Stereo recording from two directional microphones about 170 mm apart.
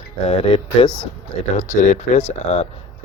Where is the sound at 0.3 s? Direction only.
35° left (ahead or behind).